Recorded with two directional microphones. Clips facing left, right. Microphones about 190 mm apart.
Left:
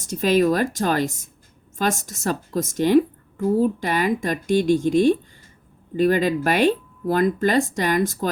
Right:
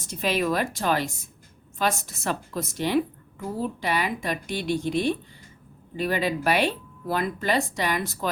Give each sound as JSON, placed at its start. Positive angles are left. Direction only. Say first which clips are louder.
{"t": 0.0, "sound": "a woman's voice", "louder": "left 7 dB", "side_deg": 45}